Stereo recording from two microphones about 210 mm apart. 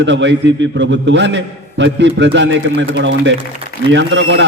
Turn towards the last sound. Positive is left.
turn(degrees=-60)  # may be behind; listen again after turning